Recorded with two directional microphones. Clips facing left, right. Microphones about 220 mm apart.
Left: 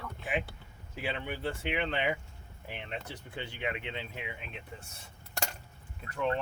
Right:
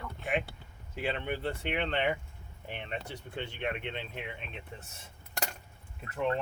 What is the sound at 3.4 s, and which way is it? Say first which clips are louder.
Speech: right 1 dB; 5° left (ahead or behind).